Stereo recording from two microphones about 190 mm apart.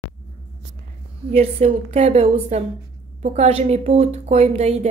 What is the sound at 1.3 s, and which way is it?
A woman's voice, 35° right (ahead or behind).